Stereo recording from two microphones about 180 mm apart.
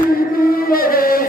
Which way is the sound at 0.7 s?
55° left (ahead or behind).